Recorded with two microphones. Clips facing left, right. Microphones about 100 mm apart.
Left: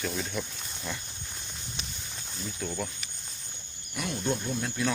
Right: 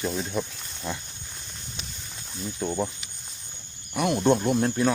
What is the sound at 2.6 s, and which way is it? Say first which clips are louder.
Speech: right 7 dB; 30° right (ahead or behind).